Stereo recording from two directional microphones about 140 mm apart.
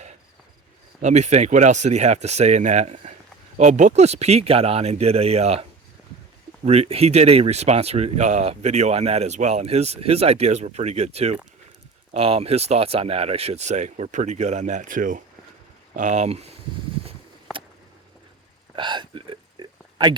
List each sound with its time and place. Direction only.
1.0 s speech: 55° right (ahead or behind)
6.7 s speech: 45° right (ahead or behind); by 15.2 s 70° right (ahead or behind)
16.0 s speech: 60° right (ahead or behind)
18.8 s a sound: 35° right (ahead or behind)